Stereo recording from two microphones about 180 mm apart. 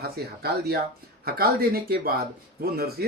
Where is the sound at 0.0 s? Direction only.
60° right (ahead or behind).